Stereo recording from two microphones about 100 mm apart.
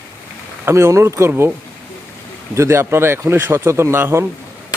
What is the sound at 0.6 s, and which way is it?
Speech, 30° right (ahead or behind).